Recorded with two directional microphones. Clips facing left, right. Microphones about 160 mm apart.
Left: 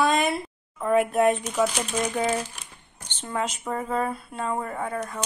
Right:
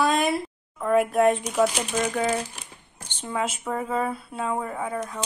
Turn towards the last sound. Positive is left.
turn(degrees=-5)  # may be behind; listen again after turning